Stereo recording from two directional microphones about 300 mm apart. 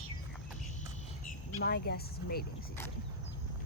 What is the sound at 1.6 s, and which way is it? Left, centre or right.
Speech, left.